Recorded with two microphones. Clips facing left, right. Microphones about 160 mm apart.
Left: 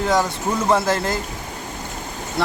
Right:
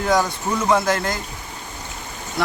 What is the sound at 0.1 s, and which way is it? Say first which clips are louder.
Speech: right 3 dB; centre (ahead or behind).